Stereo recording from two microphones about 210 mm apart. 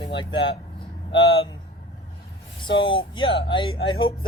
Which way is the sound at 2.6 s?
25° left (ahead or behind).